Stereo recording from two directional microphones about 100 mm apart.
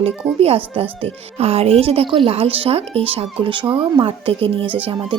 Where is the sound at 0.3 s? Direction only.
75° right (ahead or behind).